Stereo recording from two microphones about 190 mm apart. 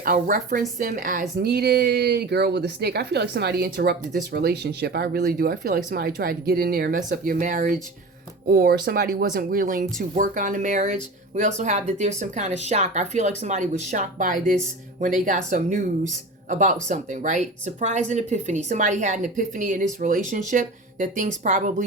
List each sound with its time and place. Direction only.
0.0 s speech: 50° right (ahead or behind)
1.5 s speech: 60° right (ahead or behind); by 21.8 s 40° right (ahead or behind)